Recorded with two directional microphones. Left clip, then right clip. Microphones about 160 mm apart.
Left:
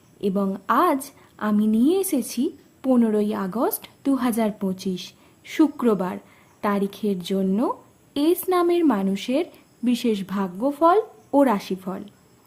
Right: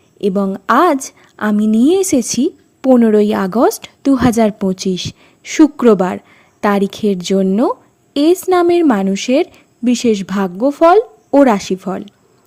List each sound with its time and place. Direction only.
0.2 s a woman's voice: 45° right (ahead or behind)